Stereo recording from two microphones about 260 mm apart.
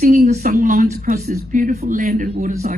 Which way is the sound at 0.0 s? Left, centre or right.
Right.